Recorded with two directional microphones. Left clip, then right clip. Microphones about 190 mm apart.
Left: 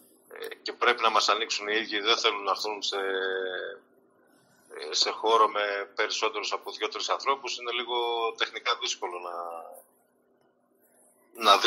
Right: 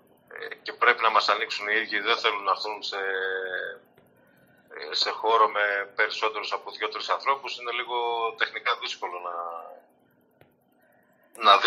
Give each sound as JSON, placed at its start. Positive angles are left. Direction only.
{"t": 0.3, "sound": "a sound", "side_deg": 30}
{"t": 0.7, "sound": "speech", "side_deg": 30}
{"t": 11.3, "sound": "speech", "side_deg": 25}